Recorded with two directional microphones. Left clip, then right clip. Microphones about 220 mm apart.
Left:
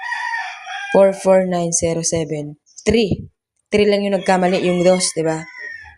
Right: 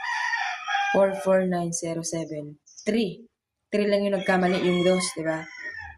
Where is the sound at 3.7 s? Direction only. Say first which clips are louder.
Left 8 dB; 35° left (ahead or behind).